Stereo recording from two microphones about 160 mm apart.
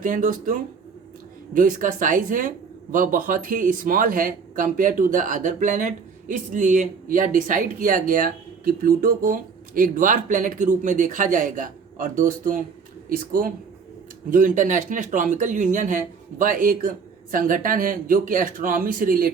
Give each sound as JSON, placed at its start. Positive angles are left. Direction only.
{"t": 0.0, "sound": "speech", "side_deg": -55}
{"t": 1.5, "sound": "speech", "side_deg": -55}